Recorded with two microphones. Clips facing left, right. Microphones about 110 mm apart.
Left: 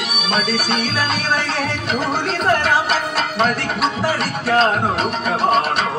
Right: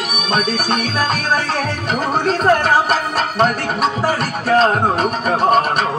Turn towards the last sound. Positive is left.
turn(degrees=-45)  # may be behind; listen again after turning